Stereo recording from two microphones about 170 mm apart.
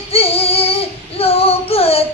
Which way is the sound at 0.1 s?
35° left (ahead or behind).